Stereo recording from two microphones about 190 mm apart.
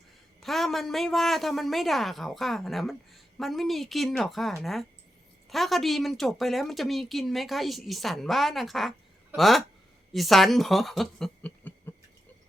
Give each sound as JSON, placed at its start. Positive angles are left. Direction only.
{"t": 0.3, "sound": "speech", "side_deg": 0}